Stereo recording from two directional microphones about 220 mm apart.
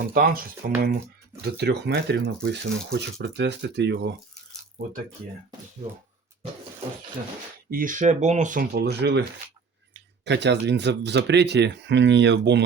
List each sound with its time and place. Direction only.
0.1 s speech: 40° right (ahead or behind)
7.7 s speech: 40° right (ahead or behind)
10.2 s speech: 50° right (ahead or behind)